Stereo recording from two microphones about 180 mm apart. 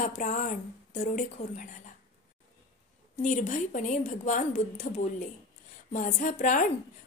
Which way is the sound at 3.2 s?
45° left (ahead or behind).